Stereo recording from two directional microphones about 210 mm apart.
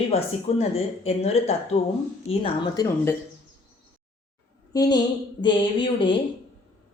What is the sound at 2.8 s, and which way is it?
Speech, 10° left (ahead or behind).